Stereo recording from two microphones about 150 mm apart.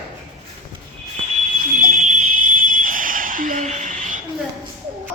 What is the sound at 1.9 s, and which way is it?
Fire alarm, 55° right (ahead or behind).